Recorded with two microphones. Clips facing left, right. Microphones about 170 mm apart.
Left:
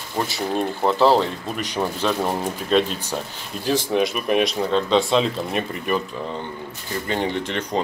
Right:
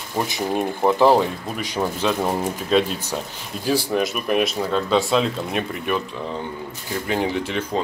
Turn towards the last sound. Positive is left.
turn(degrees=-5)  # may be behind; listen again after turning